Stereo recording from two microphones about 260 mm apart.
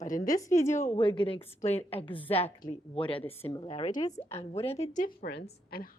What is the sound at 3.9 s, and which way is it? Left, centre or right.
Speech, centre.